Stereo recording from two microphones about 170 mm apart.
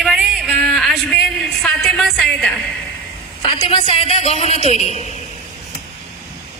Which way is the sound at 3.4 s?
30° left (ahead or behind).